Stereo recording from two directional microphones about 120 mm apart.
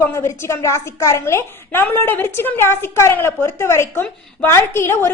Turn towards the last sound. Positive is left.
turn(degrees=20)  # may be behind; listen again after turning